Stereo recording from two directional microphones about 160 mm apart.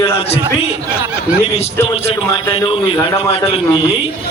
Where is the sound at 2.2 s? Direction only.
20° left (ahead or behind).